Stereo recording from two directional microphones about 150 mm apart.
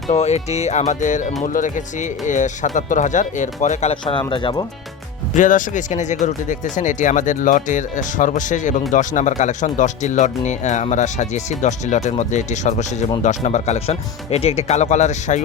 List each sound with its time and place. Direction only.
0.1 s speech: 45° left (ahead or behind)
4.3 s speech: 30° left (ahead or behind)
5.3 s speech: 60° left (ahead or behind)